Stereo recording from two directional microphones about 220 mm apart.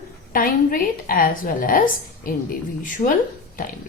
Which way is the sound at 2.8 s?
35° left (ahead or behind).